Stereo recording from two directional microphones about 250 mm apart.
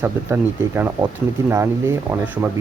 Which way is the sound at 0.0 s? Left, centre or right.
Centre.